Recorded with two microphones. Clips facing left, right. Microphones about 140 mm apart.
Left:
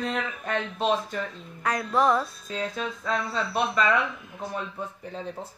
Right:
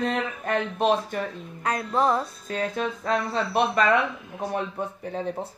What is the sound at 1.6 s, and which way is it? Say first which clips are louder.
A child's voice: even; 30° right (ahead or behind).